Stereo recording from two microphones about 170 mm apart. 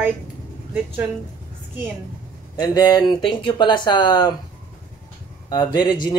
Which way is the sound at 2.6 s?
25° left (ahead or behind).